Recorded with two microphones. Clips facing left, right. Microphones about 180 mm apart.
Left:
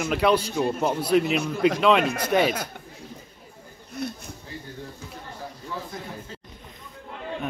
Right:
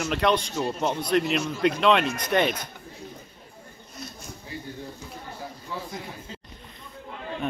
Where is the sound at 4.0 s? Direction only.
60° left (ahead or behind).